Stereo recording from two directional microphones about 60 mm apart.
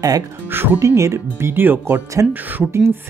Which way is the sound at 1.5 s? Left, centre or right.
Right.